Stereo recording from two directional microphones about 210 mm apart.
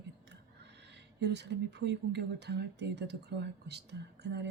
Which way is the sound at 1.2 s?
55° right (ahead or behind).